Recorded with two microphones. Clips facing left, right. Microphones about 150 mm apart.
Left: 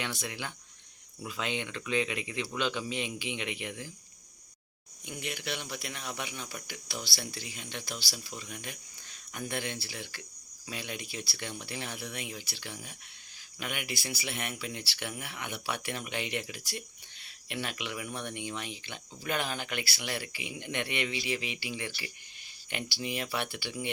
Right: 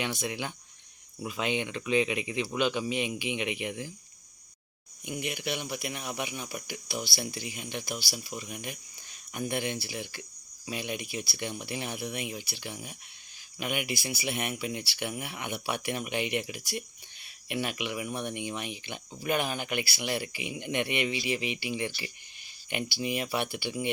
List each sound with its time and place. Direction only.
0.0 s speech: 15° right (ahead or behind)
5.0 s speech: 15° right (ahead or behind)